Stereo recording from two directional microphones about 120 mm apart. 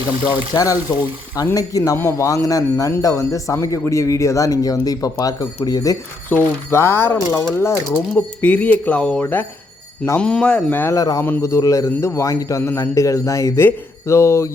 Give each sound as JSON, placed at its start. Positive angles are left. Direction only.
{"t": 0.5, "sound": "speech", "side_deg": 30}
{"t": 10.9, "sound": "speech", "side_deg": 30}